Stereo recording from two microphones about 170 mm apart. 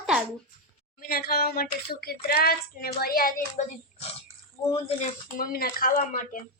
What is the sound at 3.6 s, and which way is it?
Speech, 45° left (ahead or behind).